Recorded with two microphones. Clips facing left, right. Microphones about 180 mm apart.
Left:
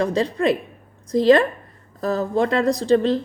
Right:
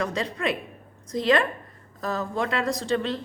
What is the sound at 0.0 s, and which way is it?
A woman's voice, 35° left (ahead or behind).